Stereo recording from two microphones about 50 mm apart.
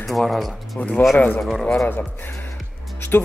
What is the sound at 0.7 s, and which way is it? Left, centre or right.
Speech, left.